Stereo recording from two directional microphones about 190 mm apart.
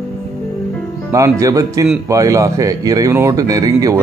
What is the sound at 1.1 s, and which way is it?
Speech, 15° right (ahead or behind).